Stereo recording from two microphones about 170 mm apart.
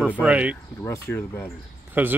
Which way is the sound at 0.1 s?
10° right (ahead or behind).